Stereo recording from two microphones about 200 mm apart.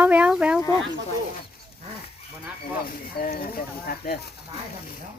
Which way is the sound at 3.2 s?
45° left (ahead or behind).